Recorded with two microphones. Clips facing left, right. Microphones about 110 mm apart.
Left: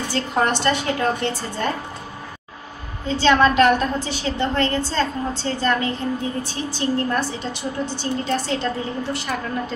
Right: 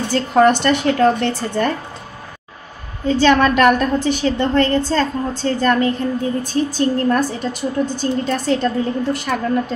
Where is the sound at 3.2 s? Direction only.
55° right (ahead or behind).